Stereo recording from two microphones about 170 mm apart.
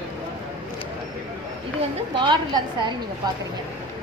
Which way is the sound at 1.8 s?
25° right (ahead or behind).